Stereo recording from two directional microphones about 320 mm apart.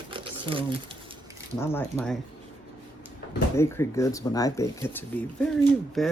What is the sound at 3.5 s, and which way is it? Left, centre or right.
Speech, centre.